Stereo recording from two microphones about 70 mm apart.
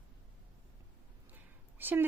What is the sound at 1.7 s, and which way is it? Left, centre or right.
Speech, right.